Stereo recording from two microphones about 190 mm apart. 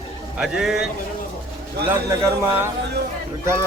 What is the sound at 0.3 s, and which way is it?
Speech, 5° right (ahead or behind).